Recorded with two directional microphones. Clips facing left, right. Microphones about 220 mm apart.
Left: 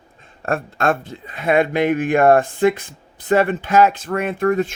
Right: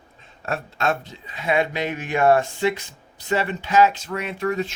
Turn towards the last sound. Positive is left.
turn(degrees=50)  # may be behind; listen again after turning